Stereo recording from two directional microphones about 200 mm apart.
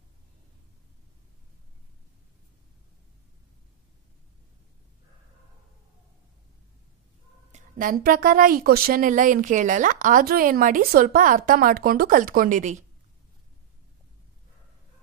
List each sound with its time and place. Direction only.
7.5 s a woman's voice: 45° right (ahead or behind)